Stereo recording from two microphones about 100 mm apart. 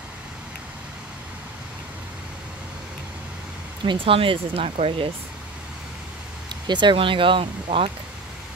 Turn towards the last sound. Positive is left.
turn(degrees=-65)  # may be behind; listen again after turning